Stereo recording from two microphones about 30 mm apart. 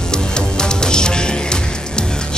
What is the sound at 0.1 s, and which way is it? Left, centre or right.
Music, left.